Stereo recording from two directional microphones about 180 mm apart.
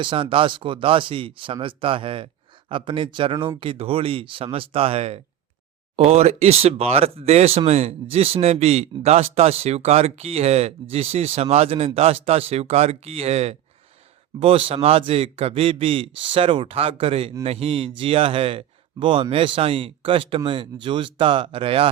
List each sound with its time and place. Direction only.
0.0 s a man's voice: 30° right (ahead or behind)